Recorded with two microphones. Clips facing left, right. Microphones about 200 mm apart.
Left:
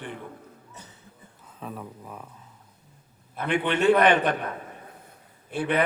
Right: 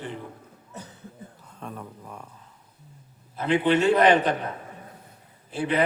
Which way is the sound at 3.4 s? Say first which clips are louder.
Right 3 dB; 60° left (ahead or behind).